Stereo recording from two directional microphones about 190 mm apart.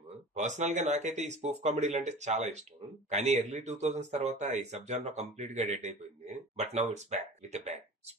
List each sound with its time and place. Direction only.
0.3 s speech: 40° right (ahead or behind)